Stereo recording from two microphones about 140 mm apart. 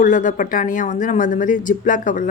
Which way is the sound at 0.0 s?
65° left (ahead or behind).